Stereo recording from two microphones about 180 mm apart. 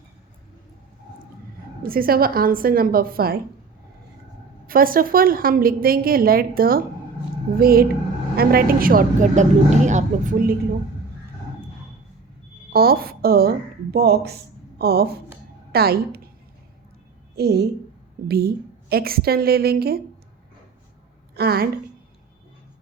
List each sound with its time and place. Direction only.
1.8 s a woman's voice: 55° right (ahead or behind)
4.6 s a woman's voice: 55° right (ahead or behind)
12.7 s a woman's voice: 55° right (ahead or behind)
17.3 s a woman's voice: 60° right (ahead or behind)
21.3 s a woman's voice: 60° right (ahead or behind)